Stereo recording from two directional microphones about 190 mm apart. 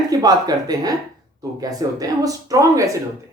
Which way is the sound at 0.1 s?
20° right (ahead or behind).